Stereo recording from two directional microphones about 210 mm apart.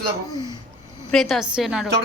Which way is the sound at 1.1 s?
Centre (ahead or behind).